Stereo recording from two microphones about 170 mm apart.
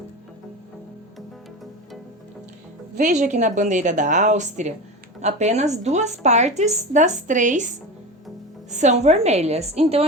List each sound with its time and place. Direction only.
3.0 s a woman's voice: 45° right (ahead or behind)
8.7 s a woman's voice: 45° right (ahead or behind)